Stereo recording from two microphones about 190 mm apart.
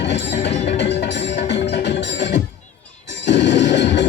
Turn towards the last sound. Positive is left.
turn(degrees=65)  # may be behind; listen again after turning